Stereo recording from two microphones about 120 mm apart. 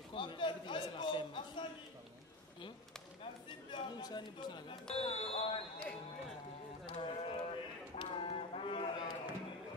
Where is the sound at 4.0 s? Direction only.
35° left (ahead or behind).